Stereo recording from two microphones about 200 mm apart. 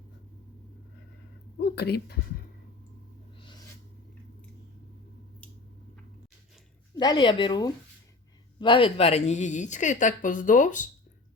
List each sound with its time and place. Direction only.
1.5 s speech: 55° left (ahead or behind)
6.9 s a woman's voice: 20° left (ahead or behind); by 10.8 s 40° left (ahead or behind)